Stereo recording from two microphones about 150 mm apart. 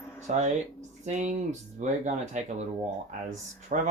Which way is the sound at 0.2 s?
50° right (ahead or behind).